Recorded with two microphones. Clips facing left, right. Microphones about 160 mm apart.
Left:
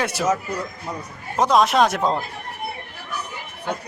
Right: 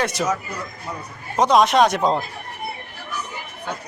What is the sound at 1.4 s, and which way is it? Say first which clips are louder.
Speech: right 1 dB; centre (ahead or behind).